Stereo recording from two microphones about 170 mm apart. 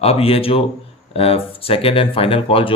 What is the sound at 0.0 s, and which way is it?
Speech, 35° left (ahead or behind).